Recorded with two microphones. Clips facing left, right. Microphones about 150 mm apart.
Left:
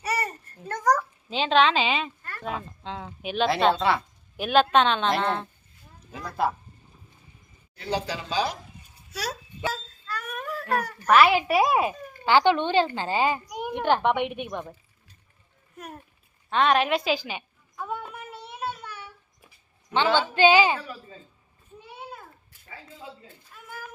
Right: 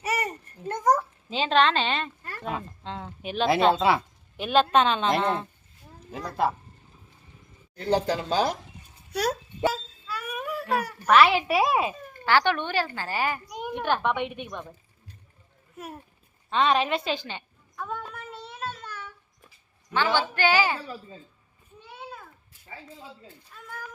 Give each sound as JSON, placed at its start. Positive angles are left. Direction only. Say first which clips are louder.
{"t": 0.0, "sound": "babbling", "louder": "even", "side_deg": -20}
{"t": 1.3, "sound": "a child's voice", "louder": "left 1 dB", "side_deg": 0}
{"t": 7.8, "sound": "speech", "louder": "right 5 dB", "side_deg": -50}
{"t": 9.6, "sound": "a sound", "louder": "right 5 dB", "side_deg": -10}
{"t": 11.1, "sound": "a child's voice", "louder": "left 1 dB", "side_deg": 5}
{"t": 12.2, "sound": "a woman's voice", "louder": "left 3 dB", "side_deg": 15}
{"t": 13.5, "sound": "a sound", "louder": "left 2 dB", "side_deg": 5}
{"t": 13.7, "sound": "a woman's voice", "louder": "left 3 dB", "side_deg": 15}
{"t": 16.5, "sound": "a sound", "louder": "left 1 dB", "side_deg": 0}
{"t": 20.1, "sound": "a woman's voice", "louder": "left 6 dB", "side_deg": 20}
{"t": 23.6, "sound": "a woman's voice", "louder": "even", "side_deg": 5}